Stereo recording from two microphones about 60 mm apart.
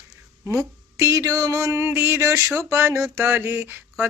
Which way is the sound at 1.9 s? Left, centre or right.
Right.